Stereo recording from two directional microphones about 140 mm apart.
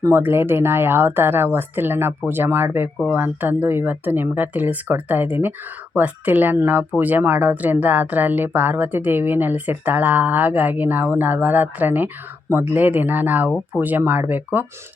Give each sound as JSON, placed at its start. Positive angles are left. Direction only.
{"t": 0.0, "sound": "speech", "side_deg": -15}